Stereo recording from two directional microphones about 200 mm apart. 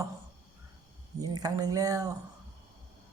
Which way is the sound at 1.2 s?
20° right (ahead or behind).